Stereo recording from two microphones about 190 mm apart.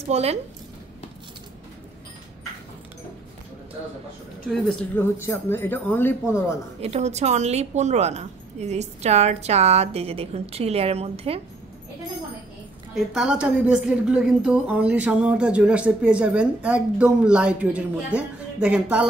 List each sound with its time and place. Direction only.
0.1 s a woman's voice: 35° right (ahead or behind)
4.5 s speech: 10° left (ahead or behind)
6.8 s a woman's voice: 35° right (ahead or behind)
12.9 s a woman's voice: centre (ahead or behind)